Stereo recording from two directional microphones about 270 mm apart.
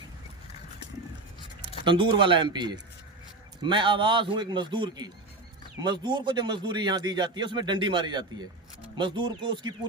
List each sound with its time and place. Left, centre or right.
1.8 s speech: centre